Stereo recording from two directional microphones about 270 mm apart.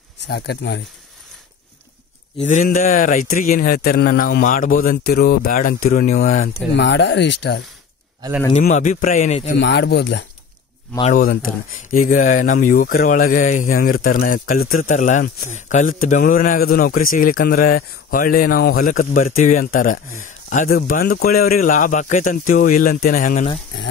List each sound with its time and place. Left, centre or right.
0.3 s a man's voice: left
2.4 s a man's voice: left
8.5 s speech: left
9.6 s a man's voice: left
11.0 s a man's voice: left